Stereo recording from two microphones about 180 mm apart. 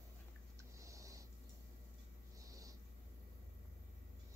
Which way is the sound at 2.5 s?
20° right (ahead or behind).